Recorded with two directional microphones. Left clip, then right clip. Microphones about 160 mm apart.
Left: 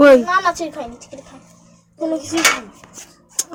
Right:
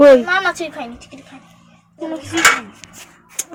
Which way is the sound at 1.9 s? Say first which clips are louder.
Left 5 dB; 90° left.